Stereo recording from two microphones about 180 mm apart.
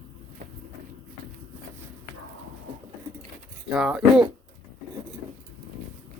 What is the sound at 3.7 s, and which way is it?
Speech, 5° right (ahead or behind).